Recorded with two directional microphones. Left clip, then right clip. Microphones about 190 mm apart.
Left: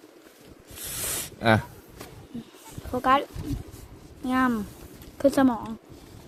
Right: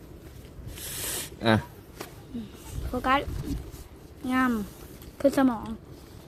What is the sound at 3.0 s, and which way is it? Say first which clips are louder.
Speech: left 3 dB; 20° left (ahead or behind).